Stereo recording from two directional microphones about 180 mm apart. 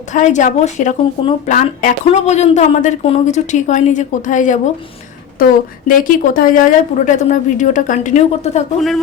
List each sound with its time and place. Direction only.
0.1 s speech: 40° left (ahead or behind)